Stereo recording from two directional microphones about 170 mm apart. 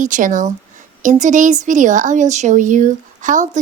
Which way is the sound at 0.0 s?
50° right (ahead or behind).